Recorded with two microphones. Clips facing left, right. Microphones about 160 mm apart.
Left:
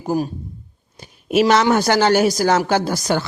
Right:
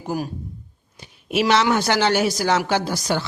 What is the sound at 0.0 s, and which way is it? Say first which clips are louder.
Speech: left 5 dB; 35° left (ahead or behind).